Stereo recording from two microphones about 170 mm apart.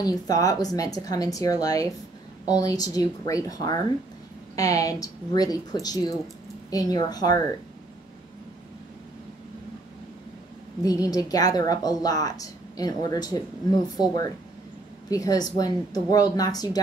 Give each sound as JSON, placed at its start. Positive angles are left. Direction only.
{"t": 0.0, "sound": "a woman's voice", "side_deg": 20}
{"t": 10.8, "sound": "a woman's voice", "side_deg": 20}